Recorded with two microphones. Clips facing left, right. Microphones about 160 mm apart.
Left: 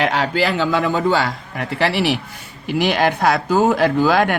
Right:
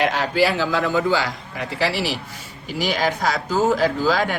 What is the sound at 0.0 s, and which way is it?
A man's voice, 70° left (ahead or behind).